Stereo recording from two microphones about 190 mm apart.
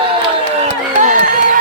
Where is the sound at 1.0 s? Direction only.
45° right (ahead or behind).